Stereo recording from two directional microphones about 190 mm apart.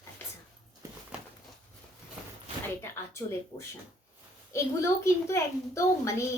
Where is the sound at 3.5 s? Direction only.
20° left (ahead or behind).